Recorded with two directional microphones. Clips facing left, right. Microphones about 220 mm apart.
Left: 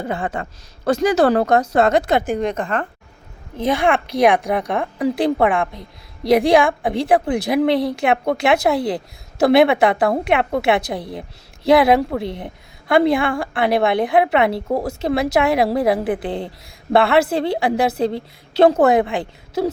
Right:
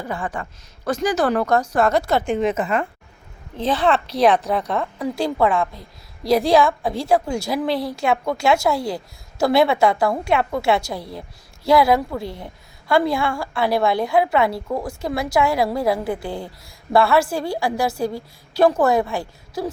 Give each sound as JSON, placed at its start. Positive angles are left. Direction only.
{"t": 0.0, "sound": "a woman's voice", "side_deg": 25}
{"t": 2.2, "sound": "a woman's voice", "side_deg": 0}
{"t": 3.6, "sound": "a woman's voice", "side_deg": 10}